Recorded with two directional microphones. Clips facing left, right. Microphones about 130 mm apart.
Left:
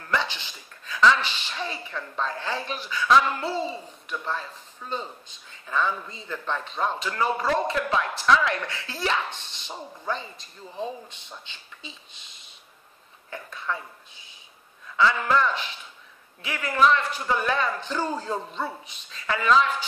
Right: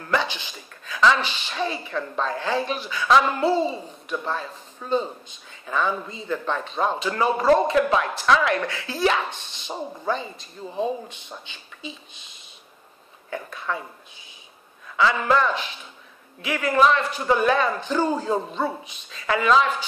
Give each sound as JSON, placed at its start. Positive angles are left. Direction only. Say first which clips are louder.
{"t": 0.1, "sound": "speech", "louder": "right 3 dB", "side_deg": -10}
{"t": 15.2, "sound": "speech", "louder": "right 2 dB", "side_deg": -15}